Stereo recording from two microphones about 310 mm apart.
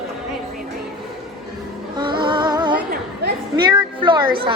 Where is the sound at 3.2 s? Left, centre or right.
Right.